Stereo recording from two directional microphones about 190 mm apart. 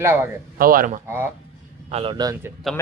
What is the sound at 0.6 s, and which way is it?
Speech, 50° right (ahead or behind).